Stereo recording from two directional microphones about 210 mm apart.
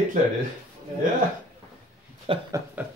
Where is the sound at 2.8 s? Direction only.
10° right (ahead or behind).